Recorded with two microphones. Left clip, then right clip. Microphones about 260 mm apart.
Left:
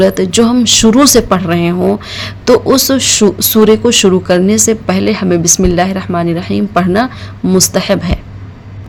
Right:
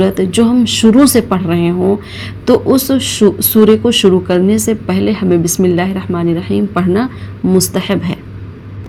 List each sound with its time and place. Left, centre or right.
0.1 s speech: left